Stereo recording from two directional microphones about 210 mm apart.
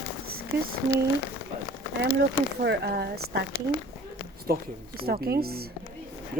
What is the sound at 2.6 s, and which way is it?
Speech, 50° right (ahead or behind).